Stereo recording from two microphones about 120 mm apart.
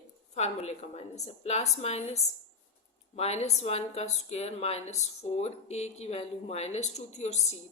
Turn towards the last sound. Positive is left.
turn(degrees=70)  # may be behind; listen again after turning